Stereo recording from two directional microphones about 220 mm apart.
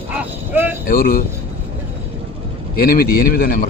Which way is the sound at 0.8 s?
40° left (ahead or behind).